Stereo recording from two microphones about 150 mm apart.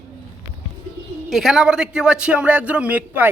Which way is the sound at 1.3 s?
Centre (ahead or behind).